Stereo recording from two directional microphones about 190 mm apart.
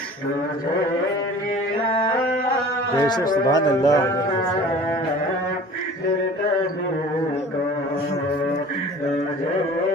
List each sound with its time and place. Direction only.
3.0 s speech: 20° left (ahead or behind)